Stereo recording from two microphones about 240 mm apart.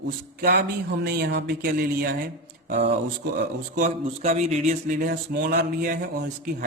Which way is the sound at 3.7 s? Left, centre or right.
Right.